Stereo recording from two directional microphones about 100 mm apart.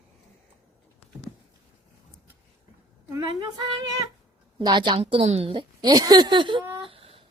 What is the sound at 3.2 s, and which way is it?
Speech, 50° right (ahead or behind).